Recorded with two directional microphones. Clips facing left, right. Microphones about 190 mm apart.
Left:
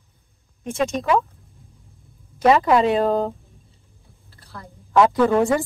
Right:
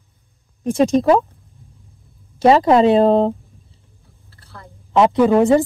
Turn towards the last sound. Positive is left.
turn(degrees=-20)  # may be behind; listen again after turning